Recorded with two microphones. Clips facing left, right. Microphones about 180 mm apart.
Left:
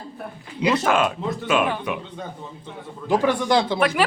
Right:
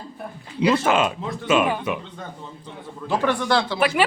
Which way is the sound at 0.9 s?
5° right (ahead or behind).